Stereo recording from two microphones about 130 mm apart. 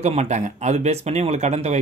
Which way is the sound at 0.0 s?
55° right (ahead or behind).